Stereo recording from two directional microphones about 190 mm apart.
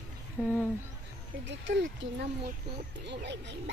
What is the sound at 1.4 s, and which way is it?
Speech, 75° right (ahead or behind).